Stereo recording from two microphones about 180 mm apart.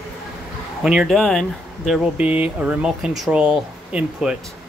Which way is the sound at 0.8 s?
5° right (ahead or behind).